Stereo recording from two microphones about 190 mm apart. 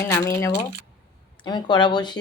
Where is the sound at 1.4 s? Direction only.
25° left (ahead or behind).